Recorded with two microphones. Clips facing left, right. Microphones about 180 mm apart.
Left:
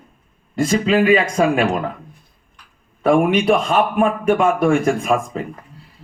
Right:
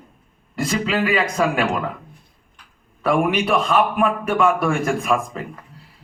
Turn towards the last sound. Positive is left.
turn(degrees=30)  # may be behind; listen again after turning